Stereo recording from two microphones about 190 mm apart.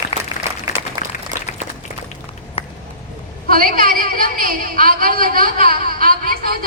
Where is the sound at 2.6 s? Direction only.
30° left (ahead or behind).